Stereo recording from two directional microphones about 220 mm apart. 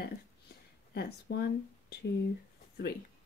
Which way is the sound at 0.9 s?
45° left (ahead or behind).